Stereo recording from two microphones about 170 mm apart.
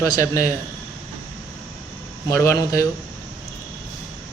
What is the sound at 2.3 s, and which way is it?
Speech, 20° left (ahead or behind).